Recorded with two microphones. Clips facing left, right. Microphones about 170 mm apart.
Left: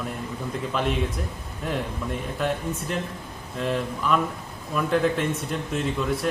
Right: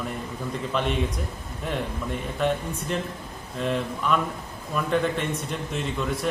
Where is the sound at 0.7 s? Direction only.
5° left (ahead or behind).